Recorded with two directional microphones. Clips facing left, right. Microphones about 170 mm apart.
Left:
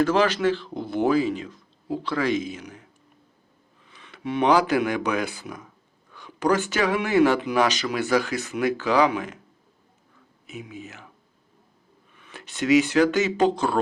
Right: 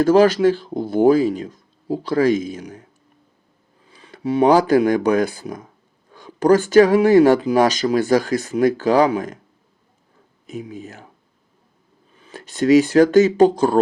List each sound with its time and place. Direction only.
0.0 s speech: 40° right (ahead or behind)
3.8 s speech: 35° right (ahead or behind)
10.4 s speech: 40° right (ahead or behind)
12.1 s speech: 35° right (ahead or behind)